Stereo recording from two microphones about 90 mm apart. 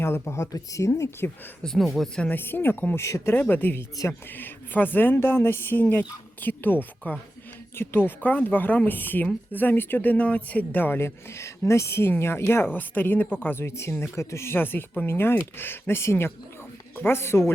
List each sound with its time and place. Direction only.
0.0 s speech: 30° left (ahead or behind)
1.6 s speech: centre (ahead or behind)
2.2 s speech: 20° left (ahead or behind)
3.3 s speech: 20° left (ahead or behind)